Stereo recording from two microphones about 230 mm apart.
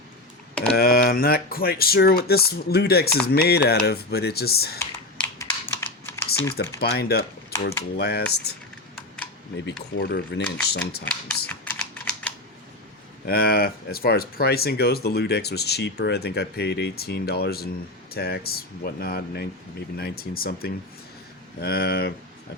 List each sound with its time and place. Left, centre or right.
0.5 s speech: centre
0.8 s speech: left
5.2 s typing: centre
6.7 s speech: left
7.5 s speech: centre
7.9 s speech: left
9.6 s speech: left
11.0 s typing: centre
13.2 s speech: left